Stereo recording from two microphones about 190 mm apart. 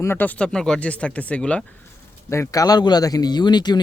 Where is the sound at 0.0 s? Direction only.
10° left (ahead or behind).